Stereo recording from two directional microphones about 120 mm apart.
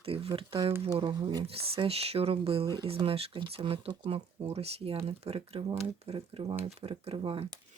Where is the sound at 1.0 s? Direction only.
35° right (ahead or behind).